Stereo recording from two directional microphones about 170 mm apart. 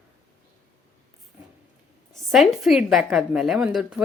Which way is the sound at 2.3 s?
Centre (ahead or behind).